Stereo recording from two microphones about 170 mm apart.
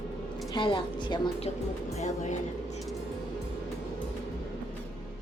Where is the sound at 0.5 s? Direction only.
30° left (ahead or behind).